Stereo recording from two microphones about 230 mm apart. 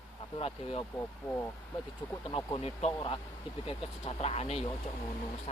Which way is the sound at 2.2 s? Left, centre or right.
Left.